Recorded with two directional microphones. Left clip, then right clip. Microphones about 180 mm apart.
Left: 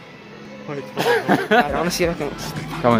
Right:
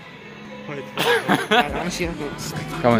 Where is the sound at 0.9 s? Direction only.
40° left (ahead or behind).